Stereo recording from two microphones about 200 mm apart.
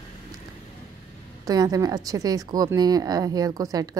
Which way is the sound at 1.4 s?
20° right (ahead or behind).